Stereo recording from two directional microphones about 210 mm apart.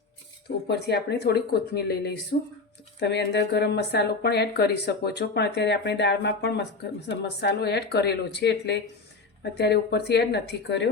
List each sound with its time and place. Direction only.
0.7 s speech: 50° left (ahead or behind)